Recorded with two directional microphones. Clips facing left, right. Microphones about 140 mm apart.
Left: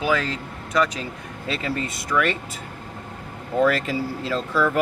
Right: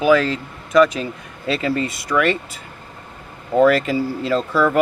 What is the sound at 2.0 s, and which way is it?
Speech, 75° right (ahead or behind).